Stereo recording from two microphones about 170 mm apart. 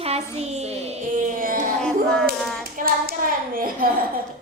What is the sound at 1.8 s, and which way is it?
Hands, 5° left (ahead or behind).